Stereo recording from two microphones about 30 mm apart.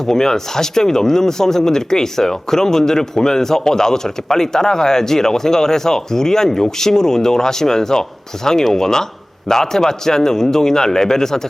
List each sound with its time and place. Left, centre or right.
0.0 s a man's voice: centre